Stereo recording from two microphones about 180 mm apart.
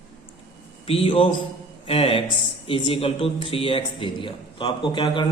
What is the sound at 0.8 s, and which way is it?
A man's voice, 30° left (ahead or behind).